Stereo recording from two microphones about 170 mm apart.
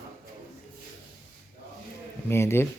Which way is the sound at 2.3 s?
15° left (ahead or behind).